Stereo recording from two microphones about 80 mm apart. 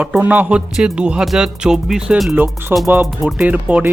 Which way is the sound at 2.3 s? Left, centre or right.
Right.